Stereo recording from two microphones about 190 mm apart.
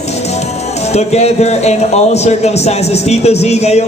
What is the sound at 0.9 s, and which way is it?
A man's voice, 35° left (ahead or behind).